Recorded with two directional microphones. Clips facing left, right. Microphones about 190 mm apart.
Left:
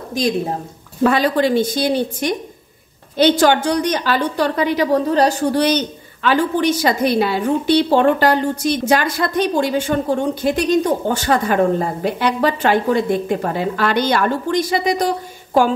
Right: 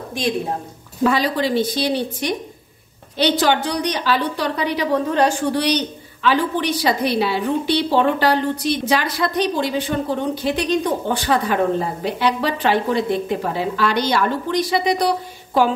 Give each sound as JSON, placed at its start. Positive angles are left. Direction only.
{"t": 1.0, "sound": "a woman's voice", "side_deg": 50}